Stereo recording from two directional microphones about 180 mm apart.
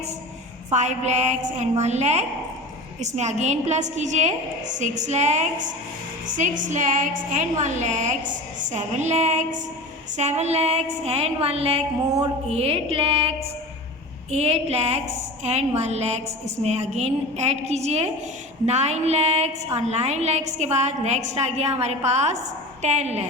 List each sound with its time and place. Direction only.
0.7 s a woman's voice: 40° right (ahead or behind)